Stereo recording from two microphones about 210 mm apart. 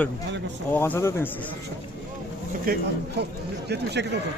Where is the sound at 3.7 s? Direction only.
55° right (ahead or behind).